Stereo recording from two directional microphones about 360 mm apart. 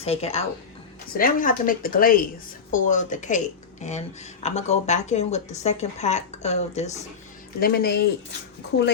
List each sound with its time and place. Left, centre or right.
0.0 s a woman's voice: centre